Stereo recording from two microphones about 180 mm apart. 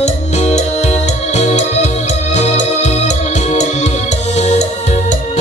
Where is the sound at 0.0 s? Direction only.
40° left (ahead or behind).